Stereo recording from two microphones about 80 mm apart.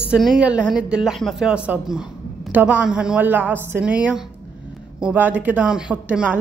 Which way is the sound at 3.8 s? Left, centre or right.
Centre.